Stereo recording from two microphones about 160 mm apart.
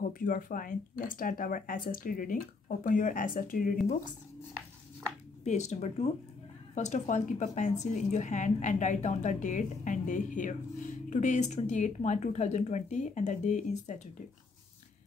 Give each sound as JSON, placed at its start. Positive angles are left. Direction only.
{"t": 0.0, "sound": "speech", "side_deg": 60}
{"t": 5.4, "sound": "a woman's voice", "side_deg": 45}